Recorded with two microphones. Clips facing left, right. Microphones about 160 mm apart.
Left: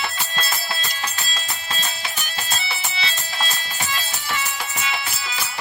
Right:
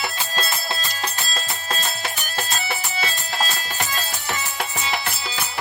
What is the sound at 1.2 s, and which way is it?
Music, 45° right (ahead or behind).